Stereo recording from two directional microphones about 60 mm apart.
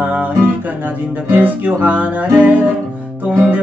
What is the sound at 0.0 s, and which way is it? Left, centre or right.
Guitar, right.